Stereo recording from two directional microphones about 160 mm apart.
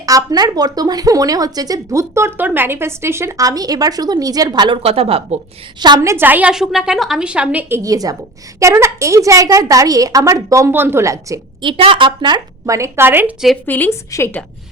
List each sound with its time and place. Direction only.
0.0 s speech: 20° right (ahead or behind); by 5.4 s 40° right (ahead or behind)
5.8 s a woman's voice: 20° right (ahead or behind)
7.8 s speech: 20° right (ahead or behind)
11.8 s speech: 30° right (ahead or behind); by 13.3 s 15° right (ahead or behind)
13.7 s a woman's voice: 10° left (ahead or behind)